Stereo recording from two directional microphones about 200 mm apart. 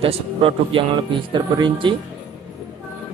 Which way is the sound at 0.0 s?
30° right (ahead or behind).